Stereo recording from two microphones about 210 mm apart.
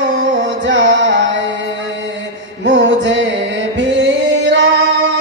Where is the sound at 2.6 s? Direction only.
60° right (ahead or behind).